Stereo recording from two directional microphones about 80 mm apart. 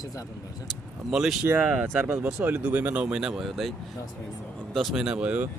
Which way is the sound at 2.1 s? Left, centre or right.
Right.